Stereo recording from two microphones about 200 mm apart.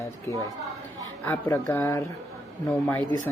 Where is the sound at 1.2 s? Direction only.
10° left (ahead or behind).